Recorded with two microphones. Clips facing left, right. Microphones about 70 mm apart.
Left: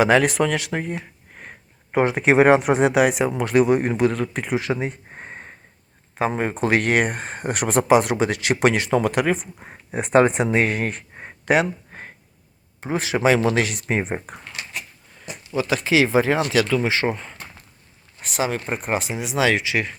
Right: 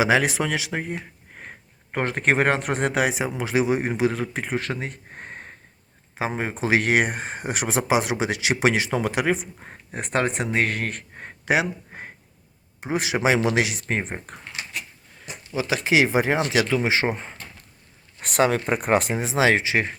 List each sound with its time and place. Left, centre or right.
0.0 s speech: centre
1.9 s speech: centre
2.9 s speech: centre
4.8 s a sound: centre
6.1 s speech: centre
9.6 s speech: centre
11.4 s a sound: centre
12.8 s speech: centre
13.9 s speech: centre
15.5 s speech: centre
16.9 s speech: right
18.2 s speech: right
19.2 s speech: right